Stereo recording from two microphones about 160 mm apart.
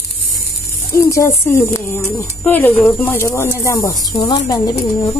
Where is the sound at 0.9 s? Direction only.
20° left (ahead or behind).